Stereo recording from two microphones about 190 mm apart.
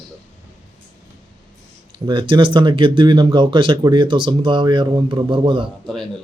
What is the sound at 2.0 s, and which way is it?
Speech, 25° right (ahead or behind).